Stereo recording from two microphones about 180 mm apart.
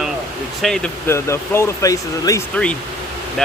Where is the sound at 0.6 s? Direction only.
5° left (ahead or behind).